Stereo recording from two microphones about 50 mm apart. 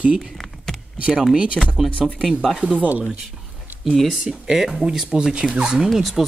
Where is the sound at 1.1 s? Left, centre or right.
Centre.